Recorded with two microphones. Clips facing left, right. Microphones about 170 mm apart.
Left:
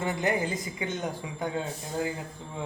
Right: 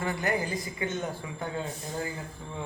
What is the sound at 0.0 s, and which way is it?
A woman's voice, 20° left (ahead or behind).